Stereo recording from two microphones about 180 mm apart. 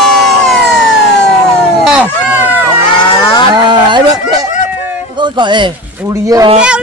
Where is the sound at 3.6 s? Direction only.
25° right (ahead or behind).